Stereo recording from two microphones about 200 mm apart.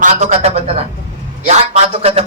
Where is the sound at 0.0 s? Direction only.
35° right (ahead or behind).